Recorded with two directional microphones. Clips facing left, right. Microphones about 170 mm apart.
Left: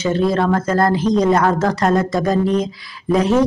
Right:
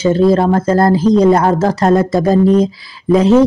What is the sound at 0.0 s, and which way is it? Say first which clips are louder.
Speech: right 6 dB; 30° right (ahead or behind).